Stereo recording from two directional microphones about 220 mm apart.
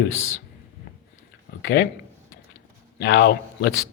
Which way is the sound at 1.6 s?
55° left (ahead or behind).